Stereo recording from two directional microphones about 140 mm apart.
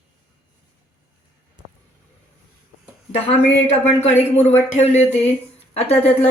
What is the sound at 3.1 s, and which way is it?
A woman's voice, 50° left (ahead or behind).